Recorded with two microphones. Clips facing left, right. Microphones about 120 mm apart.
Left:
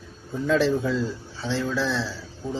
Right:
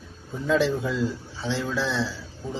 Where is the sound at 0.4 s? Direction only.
15° right (ahead or behind).